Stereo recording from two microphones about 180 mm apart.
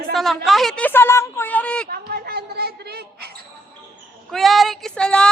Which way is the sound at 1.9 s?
60° right (ahead or behind).